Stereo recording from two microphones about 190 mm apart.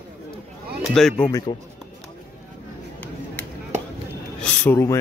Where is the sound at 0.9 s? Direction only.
Centre (ahead or behind).